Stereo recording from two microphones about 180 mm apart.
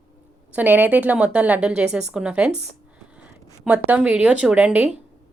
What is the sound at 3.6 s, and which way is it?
A woman's voice, 10° right (ahead or behind).